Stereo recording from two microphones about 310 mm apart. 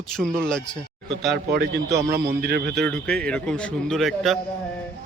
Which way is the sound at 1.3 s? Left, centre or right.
Right.